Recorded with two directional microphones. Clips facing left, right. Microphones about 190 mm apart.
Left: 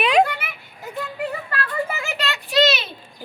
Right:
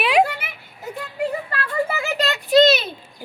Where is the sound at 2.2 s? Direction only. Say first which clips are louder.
Right 5 dB; 40° right (ahead or behind).